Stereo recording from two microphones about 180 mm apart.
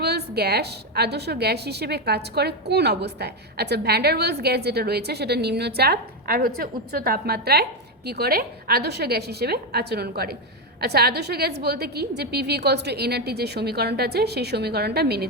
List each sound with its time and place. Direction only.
0.0 s a woman's voice: 65° right (ahead or behind)